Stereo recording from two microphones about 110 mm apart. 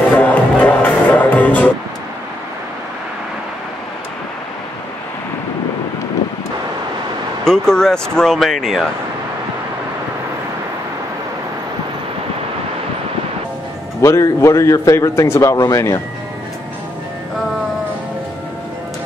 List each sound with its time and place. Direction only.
0.1 s music: 15° left (ahead or behind)
7.4 s speech: 5° left (ahead or behind)
14.0 s a man's voice: 25° left (ahead or behind)